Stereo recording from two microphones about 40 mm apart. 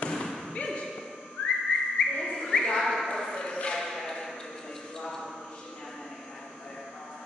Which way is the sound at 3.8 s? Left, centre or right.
Centre.